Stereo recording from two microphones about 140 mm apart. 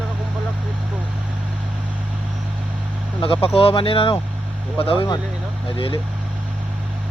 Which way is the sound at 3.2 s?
40° left (ahead or behind).